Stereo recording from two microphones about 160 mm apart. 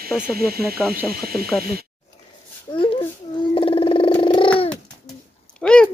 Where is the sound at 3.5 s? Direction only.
35° left (ahead or behind).